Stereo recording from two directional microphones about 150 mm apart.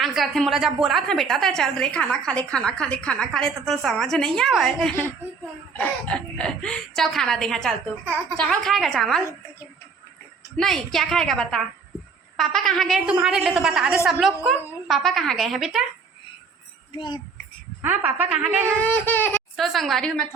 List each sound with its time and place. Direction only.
0.0 s a woman's voice: centre (ahead or behind)
10.6 s a woman's voice: centre (ahead or behind)
16.9 s a child's voice: 30° left (ahead or behind)
17.8 s a woman's voice: 10° right (ahead or behind)
18.8 s speech: 10° left (ahead or behind)
19.5 s a woman's voice: centre (ahead or behind)